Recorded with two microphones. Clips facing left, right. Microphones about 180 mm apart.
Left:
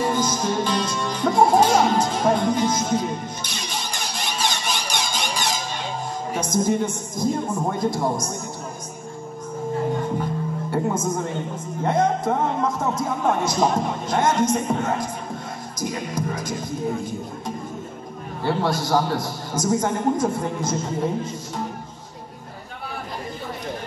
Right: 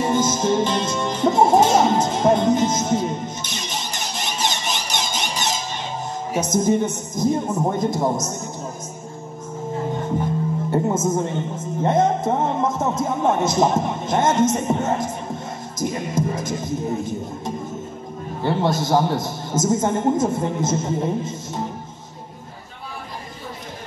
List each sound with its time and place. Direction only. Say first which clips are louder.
0.0 s music: right 3 dB; 25° right (ahead or behind)
6.4 s speech: right 2 dB; 20° right (ahead or behind)
10.1 s speech: right 3 dB; 20° right (ahead or behind)
18.4 s speech: right 2 dB; 20° right (ahead or behind)